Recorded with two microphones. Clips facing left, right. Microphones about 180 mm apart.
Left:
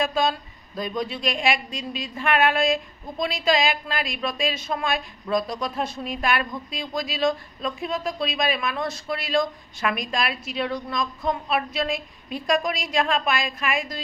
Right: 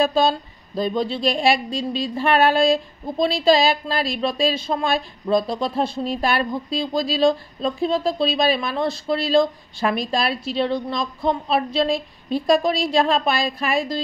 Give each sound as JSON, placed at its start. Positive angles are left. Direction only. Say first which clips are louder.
{"t": 0.0, "sound": "a woman's voice", "louder": "right 5 dB", "side_deg": -30}